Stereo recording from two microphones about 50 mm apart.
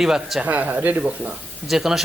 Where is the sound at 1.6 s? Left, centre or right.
Centre.